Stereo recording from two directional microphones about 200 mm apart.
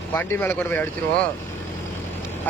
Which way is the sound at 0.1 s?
10° left (ahead or behind).